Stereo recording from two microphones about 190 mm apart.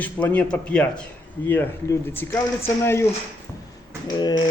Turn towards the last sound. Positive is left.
turn(degrees=25)  # may be behind; listen again after turning